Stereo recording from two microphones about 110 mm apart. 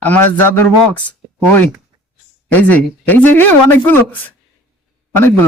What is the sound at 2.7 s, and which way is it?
Speech, 15° left (ahead or behind).